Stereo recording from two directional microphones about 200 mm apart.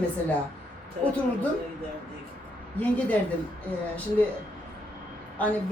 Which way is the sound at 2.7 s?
5° left (ahead or behind).